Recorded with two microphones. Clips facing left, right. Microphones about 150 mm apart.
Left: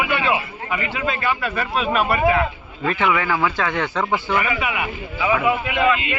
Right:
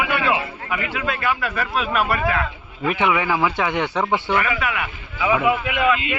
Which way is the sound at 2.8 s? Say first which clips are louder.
Even; 15° right (ahead or behind).